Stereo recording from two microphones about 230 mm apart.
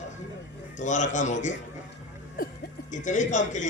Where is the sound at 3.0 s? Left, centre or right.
Left.